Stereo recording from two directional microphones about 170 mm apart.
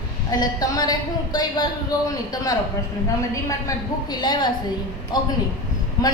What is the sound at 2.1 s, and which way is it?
A woman's voice, 20° left (ahead or behind).